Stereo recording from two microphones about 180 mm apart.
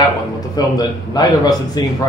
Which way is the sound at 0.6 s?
20° left (ahead or behind).